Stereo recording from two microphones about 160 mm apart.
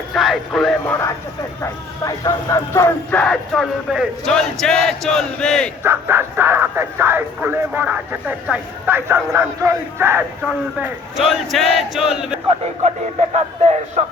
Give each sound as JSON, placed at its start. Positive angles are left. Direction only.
{"t": 0.1, "sound": "speech", "side_deg": 0}
{"t": 1.6, "sound": "speech", "side_deg": 20}
{"t": 5.8, "sound": "speech", "side_deg": -15}
{"t": 13.3, "sound": "a man's voice", "side_deg": -45}